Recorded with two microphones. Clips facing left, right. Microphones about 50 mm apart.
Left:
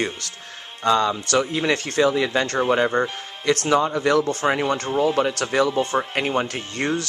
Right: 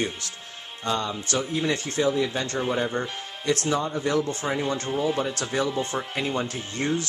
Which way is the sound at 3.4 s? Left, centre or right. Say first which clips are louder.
Left 6 dB; left.